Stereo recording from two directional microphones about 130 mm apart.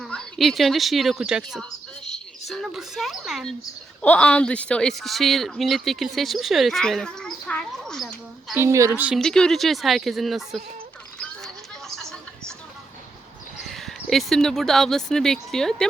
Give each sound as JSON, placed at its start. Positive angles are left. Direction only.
{"t": 0.0, "sound": "a woman's voice", "side_deg": 5}
{"t": 4.0, "sound": "speech", "side_deg": 10}
{"t": 8.5, "sound": "a woman's voice", "side_deg": -20}
{"t": 9.1, "sound": "speech", "side_deg": 5}
{"t": 11.2, "sound": "a sound", "side_deg": 5}
{"t": 13.6, "sound": "speech", "side_deg": 0}